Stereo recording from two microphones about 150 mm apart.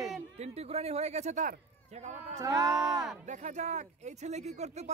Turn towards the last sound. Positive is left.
turn(degrees=-50)  # may be behind; listen again after turning